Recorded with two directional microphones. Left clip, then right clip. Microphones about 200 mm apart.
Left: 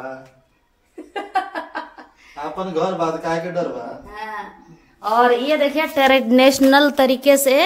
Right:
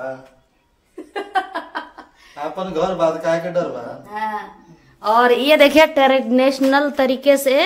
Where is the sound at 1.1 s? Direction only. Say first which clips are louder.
Right 1 dB; 5° left (ahead or behind).